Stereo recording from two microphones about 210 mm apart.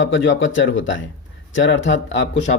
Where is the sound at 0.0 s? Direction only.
65° left (ahead or behind).